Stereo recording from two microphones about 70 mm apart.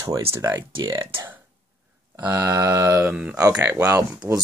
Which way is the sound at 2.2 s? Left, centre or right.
Right.